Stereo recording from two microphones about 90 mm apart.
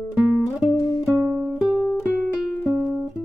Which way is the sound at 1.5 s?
5° left (ahead or behind).